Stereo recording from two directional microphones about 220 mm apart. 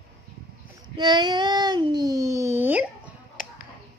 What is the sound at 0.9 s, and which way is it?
Speech, 20° right (ahead or behind).